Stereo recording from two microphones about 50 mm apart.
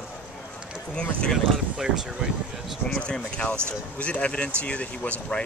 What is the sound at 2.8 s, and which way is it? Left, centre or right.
Speech, left.